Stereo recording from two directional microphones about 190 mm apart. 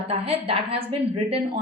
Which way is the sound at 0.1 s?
30° right (ahead or behind).